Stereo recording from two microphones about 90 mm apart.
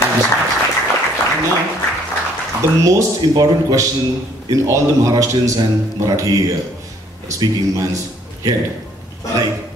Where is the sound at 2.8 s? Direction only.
35° right (ahead or behind).